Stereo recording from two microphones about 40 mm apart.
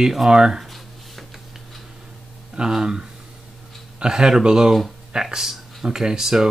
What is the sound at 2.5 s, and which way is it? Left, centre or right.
Speech, centre.